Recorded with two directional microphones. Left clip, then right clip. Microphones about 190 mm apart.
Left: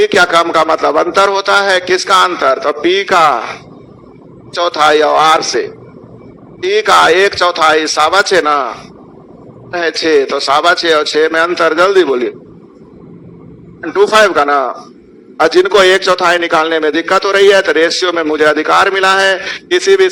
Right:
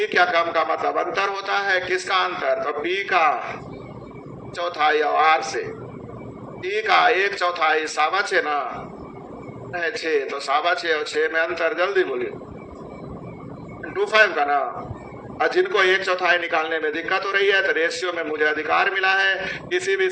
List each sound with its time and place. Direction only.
0.0 s a man's voice: 45° left (ahead or behind)
9.7 s a man's voice: 45° left (ahead or behind)
13.8 s a man's voice: 45° left (ahead or behind)